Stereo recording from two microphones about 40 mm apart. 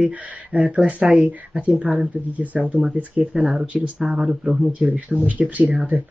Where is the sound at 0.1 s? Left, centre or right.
Right.